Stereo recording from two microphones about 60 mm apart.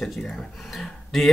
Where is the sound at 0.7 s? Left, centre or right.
Centre.